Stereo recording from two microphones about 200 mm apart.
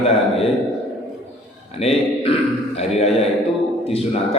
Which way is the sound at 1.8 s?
30° left (ahead or behind).